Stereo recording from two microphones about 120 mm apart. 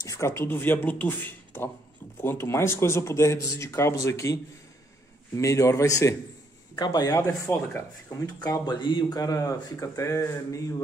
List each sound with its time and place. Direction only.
0.0 s a man's voice: 25° left (ahead or behind)
6.7 s a man's voice: 35° left (ahead or behind)